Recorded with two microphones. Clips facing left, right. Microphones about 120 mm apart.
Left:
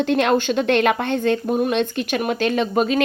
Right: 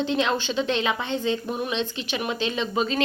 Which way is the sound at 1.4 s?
45° left (ahead or behind).